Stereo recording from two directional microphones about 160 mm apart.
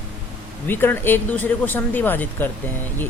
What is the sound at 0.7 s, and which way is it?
Speech, 15° left (ahead or behind).